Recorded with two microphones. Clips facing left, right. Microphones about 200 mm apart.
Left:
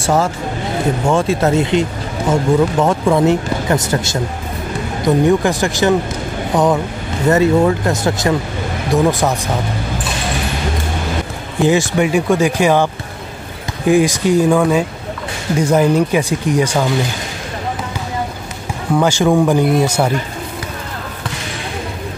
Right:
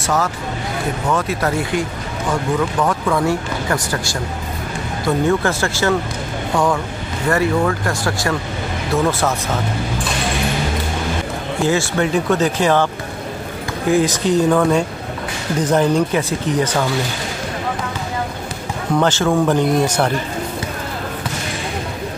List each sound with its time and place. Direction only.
0.0 s speech: 30° left (ahead or behind)
11.6 s speech: 15° left (ahead or behind)
18.9 s speech: 10° left (ahead or behind)